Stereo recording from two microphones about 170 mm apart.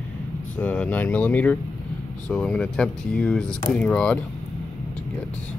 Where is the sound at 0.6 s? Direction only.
10° left (ahead or behind).